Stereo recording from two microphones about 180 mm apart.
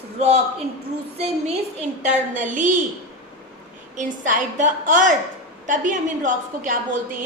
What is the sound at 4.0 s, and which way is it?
A woman's voice, 45° right (ahead or behind).